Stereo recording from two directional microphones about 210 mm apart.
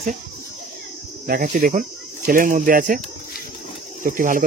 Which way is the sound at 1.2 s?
45° right (ahead or behind).